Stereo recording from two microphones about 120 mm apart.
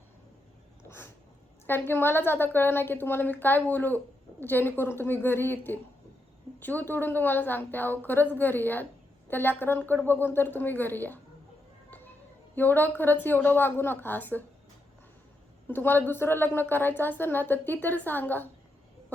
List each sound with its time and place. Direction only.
0.9 s a sound: 20° left (ahead or behind)
1.6 s a woman's voice: 15° left (ahead or behind)
12.5 s a woman's voice: 15° left (ahead or behind)
15.6 s a woman's voice: 15° left (ahead or behind)